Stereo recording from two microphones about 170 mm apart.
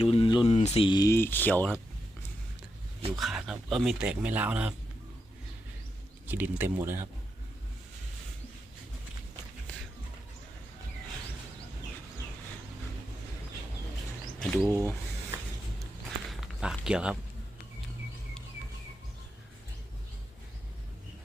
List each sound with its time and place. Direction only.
0.0 s speech: 35° left (ahead or behind); by 1.7 s 10° left (ahead or behind)
3.1 s a man's voice: centre (ahead or behind)
6.2 s speech: 10° right (ahead or behind)
9.7 s music: 5° left (ahead or behind)
14.3 s speech: 5° left (ahead or behind)
16.3 s walk: centre (ahead or behind)
16.8 s a man's voice: 5° right (ahead or behind)